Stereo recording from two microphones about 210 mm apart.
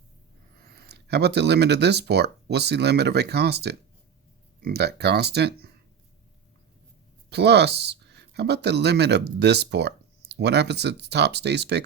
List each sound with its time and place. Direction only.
0.8 s speech: 50° right (ahead or behind)
7.3 s speech: 50° right (ahead or behind)